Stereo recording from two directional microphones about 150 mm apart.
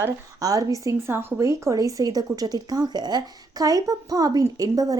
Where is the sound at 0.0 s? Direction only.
25° right (ahead or behind).